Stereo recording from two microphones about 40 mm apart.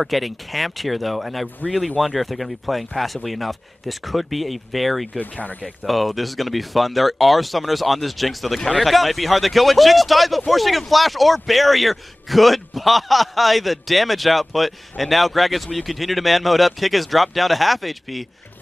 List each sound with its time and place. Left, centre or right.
0.0 s a man's voice: centre
5.2 s speech: left
5.9 s a man's voice: centre